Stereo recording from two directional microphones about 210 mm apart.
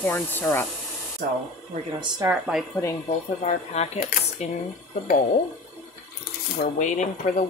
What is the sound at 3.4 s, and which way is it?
Speech, 30° left (ahead or behind).